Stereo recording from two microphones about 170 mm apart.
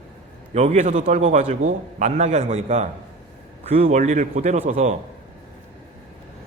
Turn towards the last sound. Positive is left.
turn(degrees=-45)  # may be behind; listen again after turning